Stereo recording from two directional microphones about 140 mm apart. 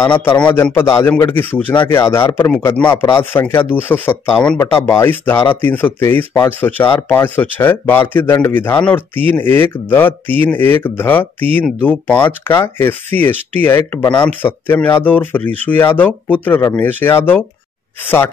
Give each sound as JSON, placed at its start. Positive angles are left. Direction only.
{"t": 0.2, "sound": "speech", "side_deg": 15}
{"t": 14.0, "sound": "speech", "side_deg": 35}
{"t": 14.4, "sound": "speech", "side_deg": 15}